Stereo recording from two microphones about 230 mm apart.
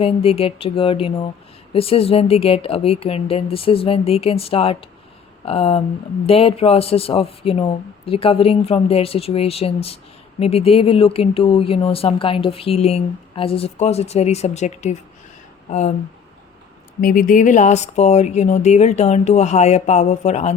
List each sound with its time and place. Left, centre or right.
0.0 s speech: left
17.0 s speech: left